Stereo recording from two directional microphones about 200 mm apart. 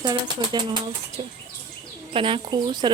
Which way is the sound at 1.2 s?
35° right (ahead or behind).